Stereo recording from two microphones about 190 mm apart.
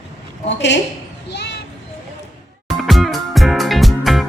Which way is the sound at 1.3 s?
65° left (ahead or behind).